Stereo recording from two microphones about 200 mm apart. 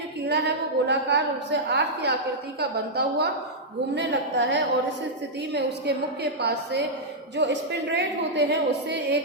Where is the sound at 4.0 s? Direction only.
60° right (ahead or behind).